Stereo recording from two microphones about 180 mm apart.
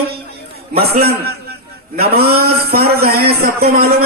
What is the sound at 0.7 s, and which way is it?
A man's voice, 60° right (ahead or behind).